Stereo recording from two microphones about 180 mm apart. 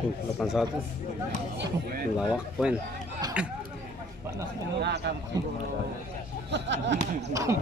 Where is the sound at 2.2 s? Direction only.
5° right (ahead or behind).